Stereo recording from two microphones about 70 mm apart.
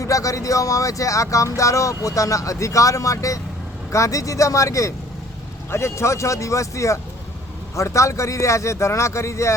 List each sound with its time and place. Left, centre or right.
0.0 s speech: left